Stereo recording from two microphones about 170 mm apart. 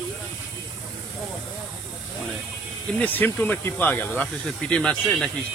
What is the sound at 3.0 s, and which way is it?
Speech, 10° left (ahead or behind).